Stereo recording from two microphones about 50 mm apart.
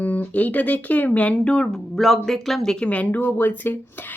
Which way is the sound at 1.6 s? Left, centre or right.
Centre.